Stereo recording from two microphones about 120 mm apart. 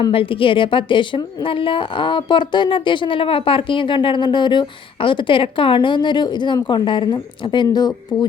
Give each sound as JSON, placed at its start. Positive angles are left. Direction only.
{"t": 0.1, "sound": "a woman's voice", "side_deg": 50}